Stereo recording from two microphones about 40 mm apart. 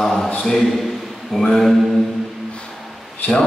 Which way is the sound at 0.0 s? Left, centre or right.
Centre.